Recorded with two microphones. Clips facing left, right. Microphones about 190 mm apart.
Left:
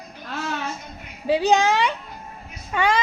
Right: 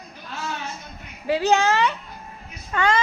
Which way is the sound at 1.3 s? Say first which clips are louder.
Left 1 dB; 15° left (ahead or behind).